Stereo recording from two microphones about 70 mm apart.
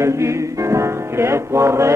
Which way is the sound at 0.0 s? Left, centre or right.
Right.